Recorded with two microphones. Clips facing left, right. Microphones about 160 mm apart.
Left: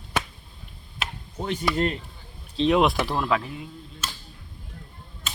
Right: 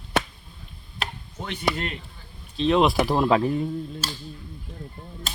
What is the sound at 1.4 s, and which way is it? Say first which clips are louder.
Speech: left 3 dB; 40° left (ahead or behind).